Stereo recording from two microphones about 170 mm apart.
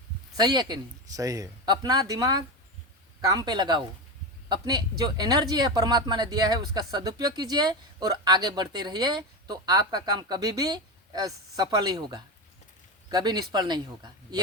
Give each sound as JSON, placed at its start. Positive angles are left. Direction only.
{"t": 0.3, "sound": "speech", "side_deg": -25}